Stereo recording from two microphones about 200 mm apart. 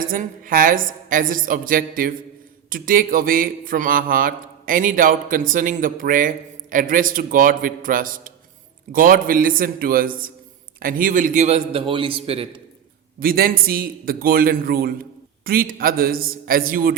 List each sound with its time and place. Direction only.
0.0 s mantra: 45° right (ahead or behind)
10.8 s a man's voice: 45° right (ahead or behind); by 12.6 s 30° right (ahead or behind)
13.1 s mantra: 45° right (ahead or behind)